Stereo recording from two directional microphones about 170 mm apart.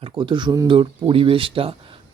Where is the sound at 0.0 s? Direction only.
30° right (ahead or behind).